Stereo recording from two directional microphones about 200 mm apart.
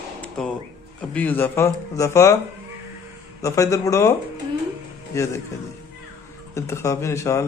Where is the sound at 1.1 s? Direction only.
10° left (ahead or behind).